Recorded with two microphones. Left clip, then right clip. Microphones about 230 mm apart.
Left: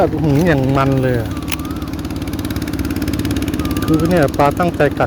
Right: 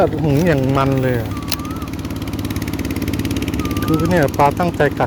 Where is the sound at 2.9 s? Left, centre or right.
Centre.